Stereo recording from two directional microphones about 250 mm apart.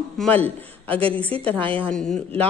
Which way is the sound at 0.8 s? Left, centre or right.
Right.